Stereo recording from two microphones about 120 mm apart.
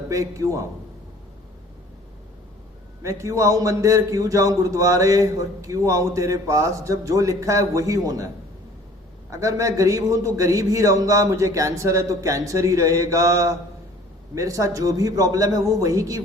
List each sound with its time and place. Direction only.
0.1 s a man's voice: 25° right (ahead or behind)
3.0 s a man's voice: 25° right (ahead or behind)
9.3 s a man's voice: 30° right (ahead or behind)